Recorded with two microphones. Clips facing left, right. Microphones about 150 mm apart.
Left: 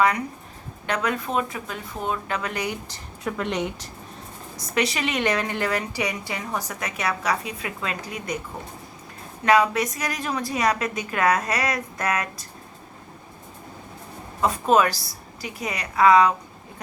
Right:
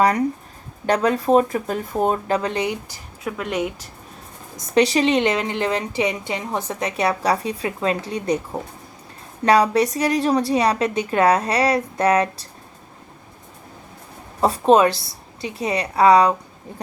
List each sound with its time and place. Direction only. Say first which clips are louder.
0.9 s a woman's voice: right 9 dB; 35° right (ahead or behind)
2.9 s speech: right 1 dB; 5° right (ahead or behind)
4.7 s a woman's voice: right 8 dB; 30° right (ahead or behind)
9.4 s a woman's voice: right 4 dB; 35° right (ahead or behind)
14.4 s a woman's voice: right 5 dB; 30° right (ahead or behind)